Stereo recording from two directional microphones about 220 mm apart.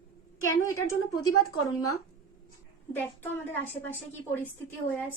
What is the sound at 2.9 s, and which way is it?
Speech, 10° left (ahead or behind).